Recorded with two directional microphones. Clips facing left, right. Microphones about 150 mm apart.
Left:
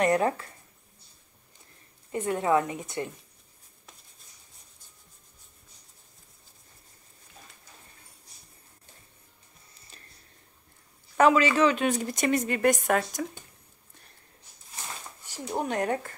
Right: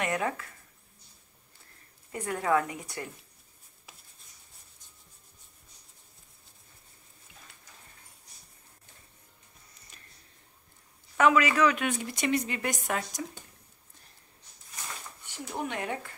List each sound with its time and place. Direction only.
0.0 s a woman's voice: 35° left (ahead or behind)
2.1 s a woman's voice: 20° left (ahead or behind)
9.9 s a sound: 35° left (ahead or behind)
11.1 s a woman's voice: 35° left (ahead or behind); by 13.2 s 55° left (ahead or behind)
15.2 s speech: 40° left (ahead or behind)